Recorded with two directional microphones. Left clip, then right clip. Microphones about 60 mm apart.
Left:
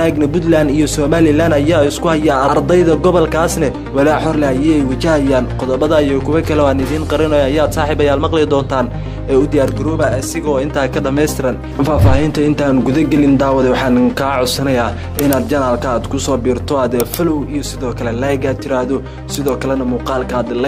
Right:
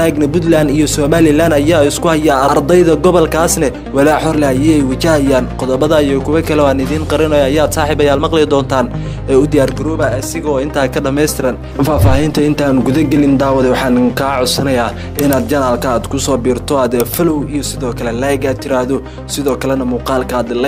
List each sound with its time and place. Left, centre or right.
0.0 s a man's voice: right
9.9 s a man's voice: centre
18.2 s a man's voice: right